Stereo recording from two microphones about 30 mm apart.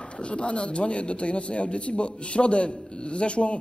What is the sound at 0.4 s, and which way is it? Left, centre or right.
Music, left.